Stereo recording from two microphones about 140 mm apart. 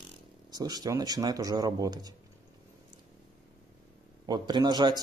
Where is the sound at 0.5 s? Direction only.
30° right (ahead or behind).